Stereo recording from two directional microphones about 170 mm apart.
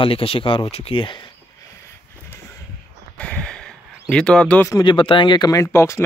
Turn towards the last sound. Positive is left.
turn(degrees=15)  # may be behind; listen again after turning